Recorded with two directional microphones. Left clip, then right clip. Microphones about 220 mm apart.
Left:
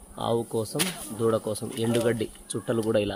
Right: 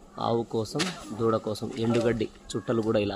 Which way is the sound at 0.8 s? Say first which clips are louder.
Left 1 dB; 50° left (ahead or behind).